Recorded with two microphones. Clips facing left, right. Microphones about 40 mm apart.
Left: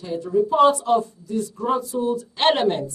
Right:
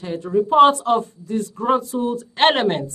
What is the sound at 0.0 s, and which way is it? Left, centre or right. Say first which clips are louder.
Speech: right 1 dB; right.